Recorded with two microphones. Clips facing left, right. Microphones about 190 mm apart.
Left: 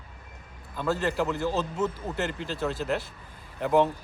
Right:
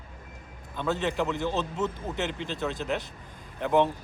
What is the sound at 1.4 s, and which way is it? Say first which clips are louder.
Speech: left 1 dB; 20° right (ahead or behind).